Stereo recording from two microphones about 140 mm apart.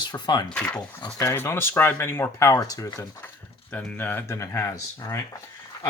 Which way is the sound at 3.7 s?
10° left (ahead or behind).